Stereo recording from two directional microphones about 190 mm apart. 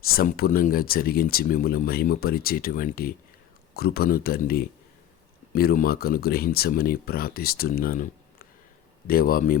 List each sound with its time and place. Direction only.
0.1 s speech: 50° left (ahead or behind)